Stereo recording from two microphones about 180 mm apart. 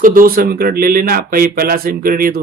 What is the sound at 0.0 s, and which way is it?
Speech, 50° right (ahead or behind).